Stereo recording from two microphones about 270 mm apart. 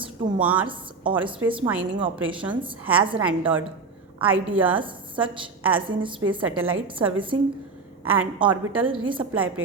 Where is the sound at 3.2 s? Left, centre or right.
Centre.